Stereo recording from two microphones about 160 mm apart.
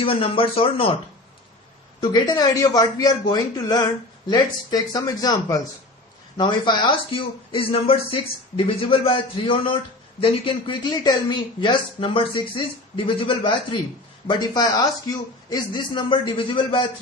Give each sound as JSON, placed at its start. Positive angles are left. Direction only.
{"t": 0.0, "sound": "a man's voice", "side_deg": 35}
{"t": 2.0, "sound": "a man's voice", "side_deg": 25}